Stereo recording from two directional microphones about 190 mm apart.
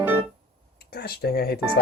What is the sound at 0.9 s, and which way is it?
Speech, 55° left (ahead or behind).